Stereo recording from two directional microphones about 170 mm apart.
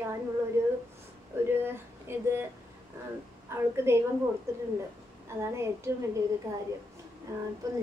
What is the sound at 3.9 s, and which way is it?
Speech, 15° right (ahead or behind).